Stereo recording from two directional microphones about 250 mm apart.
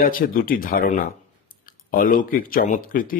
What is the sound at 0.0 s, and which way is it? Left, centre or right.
Speech, left.